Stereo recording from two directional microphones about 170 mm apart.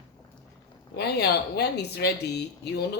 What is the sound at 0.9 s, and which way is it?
Speech, 70° left (ahead or behind).